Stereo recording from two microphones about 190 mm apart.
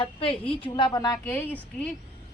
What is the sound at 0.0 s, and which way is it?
A woman's voice, 30° left (ahead or behind).